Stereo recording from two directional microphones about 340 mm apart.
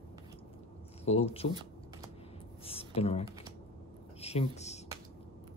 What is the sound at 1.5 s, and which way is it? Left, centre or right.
Computer keyboard, centre.